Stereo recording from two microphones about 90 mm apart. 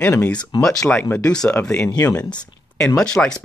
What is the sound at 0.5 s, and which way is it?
Speech, 60° left (ahead or behind).